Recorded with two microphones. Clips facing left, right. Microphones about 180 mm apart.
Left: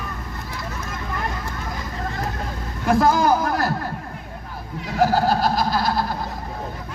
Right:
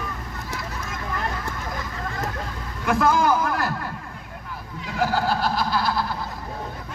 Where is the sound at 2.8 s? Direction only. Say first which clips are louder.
Left 3 dB; 35° left (ahead or behind).